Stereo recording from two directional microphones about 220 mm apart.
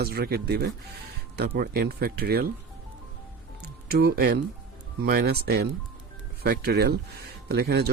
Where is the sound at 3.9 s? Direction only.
45° right (ahead or behind).